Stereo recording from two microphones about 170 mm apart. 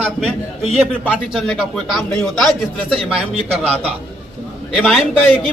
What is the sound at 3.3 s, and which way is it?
Speech, 35° right (ahead or behind).